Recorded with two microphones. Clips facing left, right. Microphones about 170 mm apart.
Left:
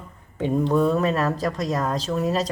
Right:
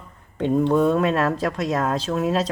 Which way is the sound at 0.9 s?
Centre (ahead or behind).